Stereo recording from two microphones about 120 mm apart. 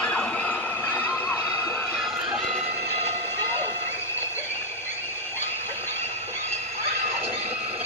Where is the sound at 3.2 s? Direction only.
20° left (ahead or behind).